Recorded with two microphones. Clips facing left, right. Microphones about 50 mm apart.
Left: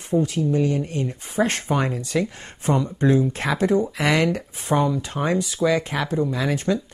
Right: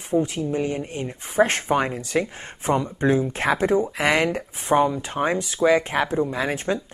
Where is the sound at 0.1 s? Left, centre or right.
Right.